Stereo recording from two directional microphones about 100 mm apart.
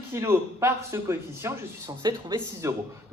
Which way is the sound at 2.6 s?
30° right (ahead or behind).